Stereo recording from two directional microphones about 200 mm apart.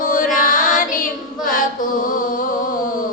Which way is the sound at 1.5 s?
45° left (ahead or behind).